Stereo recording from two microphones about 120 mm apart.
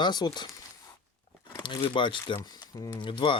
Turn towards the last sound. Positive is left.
turn(degrees=40)  # may be behind; listen again after turning